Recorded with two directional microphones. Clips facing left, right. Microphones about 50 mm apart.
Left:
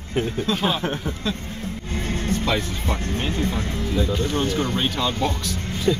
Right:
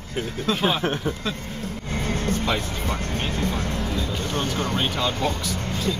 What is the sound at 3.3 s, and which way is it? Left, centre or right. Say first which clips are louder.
Speech: left 1 dB; left.